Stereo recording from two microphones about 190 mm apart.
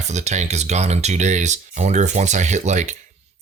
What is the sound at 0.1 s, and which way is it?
Speech, 35° right (ahead or behind).